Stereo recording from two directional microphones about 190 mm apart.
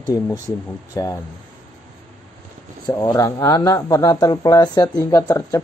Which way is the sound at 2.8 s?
20° left (ahead or behind).